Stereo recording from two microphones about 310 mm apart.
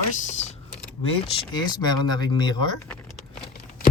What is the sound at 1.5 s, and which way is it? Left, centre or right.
Speech, centre.